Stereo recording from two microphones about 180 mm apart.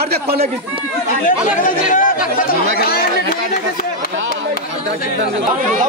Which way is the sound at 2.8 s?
60° left (ahead or behind).